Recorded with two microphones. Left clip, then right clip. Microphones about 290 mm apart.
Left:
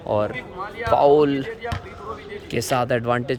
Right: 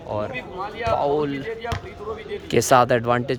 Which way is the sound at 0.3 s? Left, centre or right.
Right.